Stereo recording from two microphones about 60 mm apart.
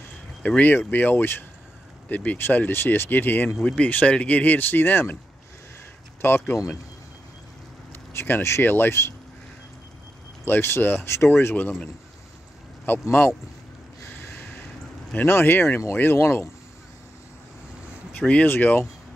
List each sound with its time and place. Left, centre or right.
0.4 s speech: left
2.0 s speech: left
6.2 s speech: left
7.9 s speech: left
10.4 s speech: left
15.2 s speech: left
18.1 s a sound: centre
18.4 s speech: left